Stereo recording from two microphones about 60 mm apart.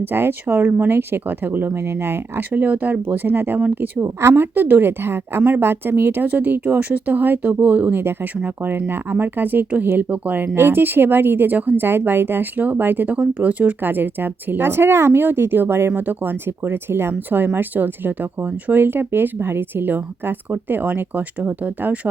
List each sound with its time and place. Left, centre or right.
0.0 s speech: right
2.5 s speech: right
4.0 s a woman's voice: right
4.5 s speech: right
4.9 s speech: right
13.1 s speech: right